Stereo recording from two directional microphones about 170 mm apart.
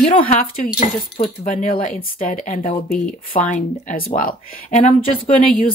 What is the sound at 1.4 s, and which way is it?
Speech, 50° left (ahead or behind).